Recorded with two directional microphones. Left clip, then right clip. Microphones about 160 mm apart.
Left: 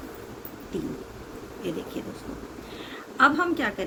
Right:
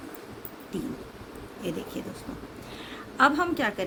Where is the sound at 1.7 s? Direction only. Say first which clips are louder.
Left 1 dB; 60° right (ahead or behind).